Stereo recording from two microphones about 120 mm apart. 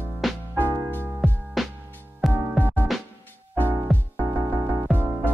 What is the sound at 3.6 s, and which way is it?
Music, 20° right (ahead or behind).